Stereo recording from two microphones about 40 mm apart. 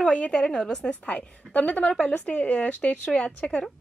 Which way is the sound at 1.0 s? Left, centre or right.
Left.